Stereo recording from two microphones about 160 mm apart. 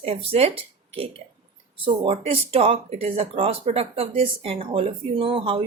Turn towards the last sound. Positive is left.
turn(degrees=-35)  # may be behind; listen again after turning